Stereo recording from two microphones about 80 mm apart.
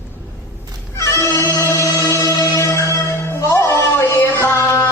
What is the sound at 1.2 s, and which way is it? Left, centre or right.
Music, left.